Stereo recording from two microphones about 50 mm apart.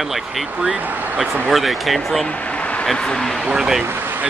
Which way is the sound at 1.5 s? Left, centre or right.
Centre.